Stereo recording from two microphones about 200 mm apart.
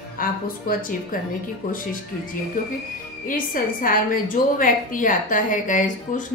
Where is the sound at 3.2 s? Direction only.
45° left (ahead or behind).